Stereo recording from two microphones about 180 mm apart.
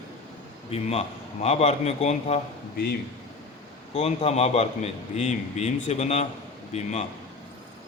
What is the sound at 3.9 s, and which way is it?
A man's voice, 35° left (ahead or behind).